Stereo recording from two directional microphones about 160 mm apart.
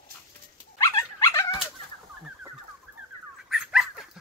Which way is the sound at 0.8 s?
15° left (ahead or behind).